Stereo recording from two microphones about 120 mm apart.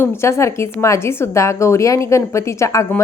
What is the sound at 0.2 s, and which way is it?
A woman's voice, 25° left (ahead or behind).